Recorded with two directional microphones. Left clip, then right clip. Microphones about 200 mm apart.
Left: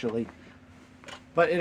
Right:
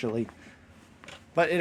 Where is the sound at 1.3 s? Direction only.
50° right (ahead or behind).